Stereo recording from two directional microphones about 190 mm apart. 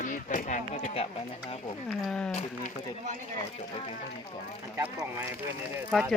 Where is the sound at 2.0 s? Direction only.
5° left (ahead or behind).